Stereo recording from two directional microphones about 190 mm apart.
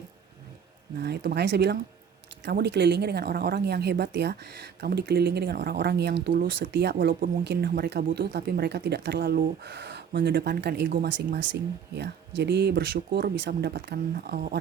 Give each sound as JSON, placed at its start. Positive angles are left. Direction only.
{"t": 1.0, "sound": "a woman's voice", "side_deg": -60}